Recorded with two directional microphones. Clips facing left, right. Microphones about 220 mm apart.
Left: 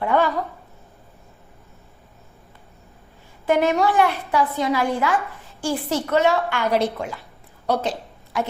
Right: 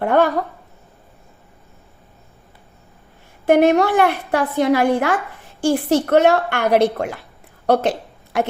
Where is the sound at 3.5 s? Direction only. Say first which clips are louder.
Right 5 dB; 65° right (ahead or behind).